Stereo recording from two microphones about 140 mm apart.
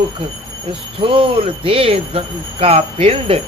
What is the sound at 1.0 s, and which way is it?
Speech, 40° right (ahead or behind).